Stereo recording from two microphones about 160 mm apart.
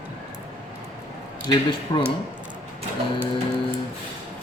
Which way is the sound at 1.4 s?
30° left (ahead or behind).